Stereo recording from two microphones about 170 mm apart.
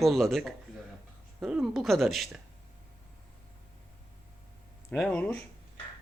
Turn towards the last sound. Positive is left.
turn(degrees=5)  # may be behind; listen again after turning